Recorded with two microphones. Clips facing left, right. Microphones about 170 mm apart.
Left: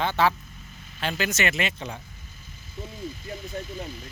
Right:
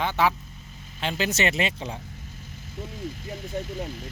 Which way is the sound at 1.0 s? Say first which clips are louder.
Right 1 dB; 25° right (ahead or behind).